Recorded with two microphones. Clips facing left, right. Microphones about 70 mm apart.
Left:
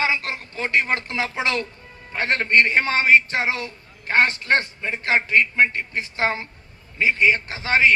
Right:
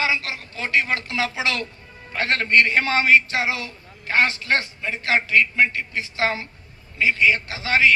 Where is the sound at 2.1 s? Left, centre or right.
Left.